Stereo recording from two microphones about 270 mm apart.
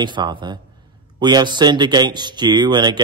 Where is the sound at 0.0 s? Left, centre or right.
Centre.